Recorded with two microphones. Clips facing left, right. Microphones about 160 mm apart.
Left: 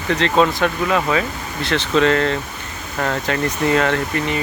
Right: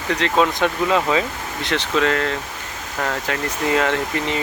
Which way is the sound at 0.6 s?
20° right (ahead or behind).